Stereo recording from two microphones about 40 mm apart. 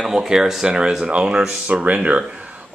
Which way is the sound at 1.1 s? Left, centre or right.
Right.